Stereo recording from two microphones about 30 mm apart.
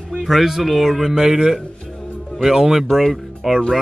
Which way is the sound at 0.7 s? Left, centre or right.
Centre.